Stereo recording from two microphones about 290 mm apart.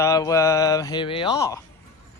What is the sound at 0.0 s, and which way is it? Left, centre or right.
Speech, centre.